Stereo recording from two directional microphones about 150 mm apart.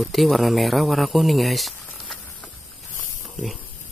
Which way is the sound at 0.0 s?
Centre (ahead or behind).